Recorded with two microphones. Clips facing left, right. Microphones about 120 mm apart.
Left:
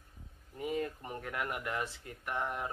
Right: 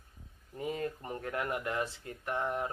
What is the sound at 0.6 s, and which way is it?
Speech, 30° right (ahead or behind).